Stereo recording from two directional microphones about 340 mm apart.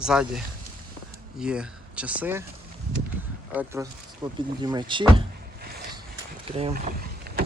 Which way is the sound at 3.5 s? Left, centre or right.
Centre.